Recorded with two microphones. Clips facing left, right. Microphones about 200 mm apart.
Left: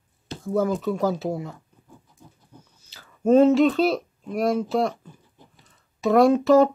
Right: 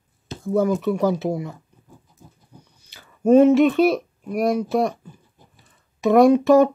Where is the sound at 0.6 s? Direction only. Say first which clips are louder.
Right 3 dB; 15° right (ahead or behind).